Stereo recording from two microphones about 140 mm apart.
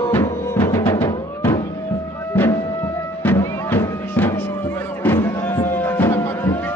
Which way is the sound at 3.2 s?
15° left (ahead or behind).